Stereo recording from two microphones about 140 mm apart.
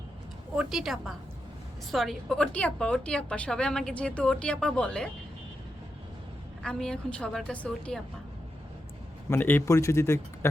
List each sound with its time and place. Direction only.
0.5 s a woman's voice: 5° right (ahead or behind)
6.6 s a woman's voice: 5° left (ahead or behind)
9.3 s speech: 15° left (ahead or behind)